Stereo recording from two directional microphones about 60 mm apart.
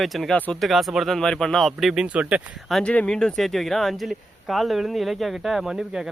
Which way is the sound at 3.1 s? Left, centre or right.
Centre.